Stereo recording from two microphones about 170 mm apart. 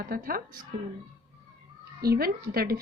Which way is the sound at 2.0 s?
65° right (ahead or behind).